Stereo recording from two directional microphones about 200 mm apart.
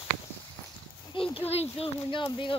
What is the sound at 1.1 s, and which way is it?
Speech, 25° left (ahead or behind).